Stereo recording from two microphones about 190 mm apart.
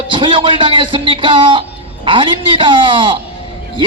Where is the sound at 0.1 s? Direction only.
25° right (ahead or behind).